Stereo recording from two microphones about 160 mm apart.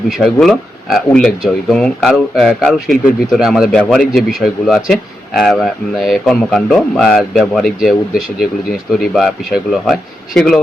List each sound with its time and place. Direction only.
0.1 s speech: centre (ahead or behind)